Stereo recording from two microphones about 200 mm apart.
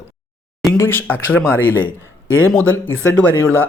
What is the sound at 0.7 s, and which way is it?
Speech, 10° left (ahead or behind).